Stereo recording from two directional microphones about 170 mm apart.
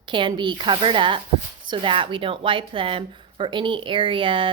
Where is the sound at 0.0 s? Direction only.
30° right (ahead or behind).